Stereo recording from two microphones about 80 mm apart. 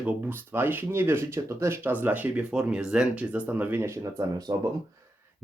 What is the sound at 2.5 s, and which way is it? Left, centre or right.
Speech, centre.